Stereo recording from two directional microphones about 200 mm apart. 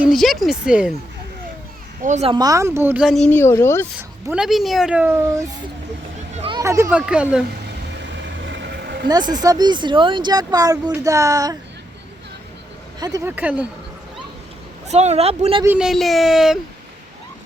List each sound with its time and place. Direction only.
0.0 s speech: centre (ahead or behind)
2.0 s speech: 35° right (ahead or behind)
2.3 s speech: 20° right (ahead or behind); by 3.8 s 15° left (ahead or behind)
4.3 s speech: 5° right (ahead or behind)
6.3 s a sound: 30° right (ahead or behind)
6.6 s speech: 15° right (ahead or behind)
8.4 s vehicle: 60° right (ahead or behind)
9.0 s speech: 20° right (ahead or behind)
13.0 s speech: 20° right (ahead or behind)
14.8 s speech: 35° right (ahead or behind)
15.6 s speech: 5° right (ahead or behind)